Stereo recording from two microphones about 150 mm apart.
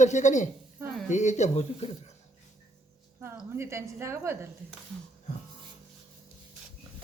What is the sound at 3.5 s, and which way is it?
Speech, 15° right (ahead or behind).